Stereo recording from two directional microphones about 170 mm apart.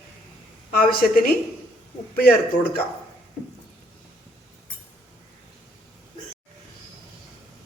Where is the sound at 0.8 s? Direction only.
60° left (ahead or behind).